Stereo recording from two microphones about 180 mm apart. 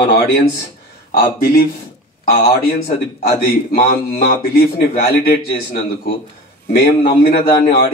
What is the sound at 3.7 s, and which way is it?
Speech, 60° left (ahead or behind).